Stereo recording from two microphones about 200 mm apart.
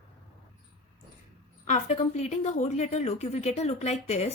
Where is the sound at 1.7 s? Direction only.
35° left (ahead or behind).